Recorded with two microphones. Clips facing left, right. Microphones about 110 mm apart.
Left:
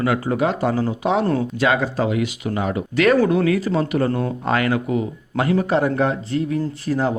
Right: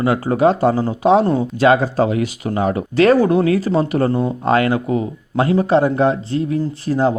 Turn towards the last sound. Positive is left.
turn(degrees=-30)  # may be behind; listen again after turning